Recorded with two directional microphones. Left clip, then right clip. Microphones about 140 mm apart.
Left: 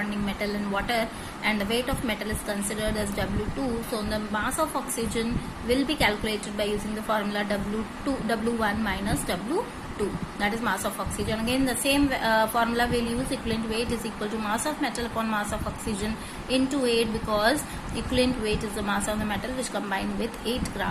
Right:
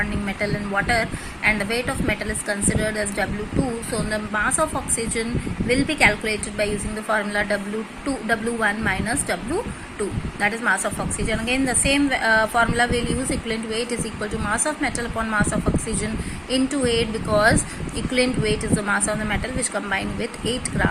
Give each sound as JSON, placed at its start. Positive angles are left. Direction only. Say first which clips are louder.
{"t": 0.3, "sound": "a woman's voice", "louder": "right 4 dB", "side_deg": -15}
{"t": 5.6, "sound": "a woman's voice", "louder": "right 6 dB", "side_deg": -15}
{"t": 10.4, "sound": "a woman's voice", "louder": "right 6 dB", "side_deg": -15}
{"t": 16.5, "sound": "a woman's voice", "louder": "right 3 dB", "side_deg": -15}